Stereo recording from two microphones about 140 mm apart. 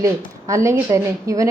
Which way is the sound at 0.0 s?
20° right (ahead or behind).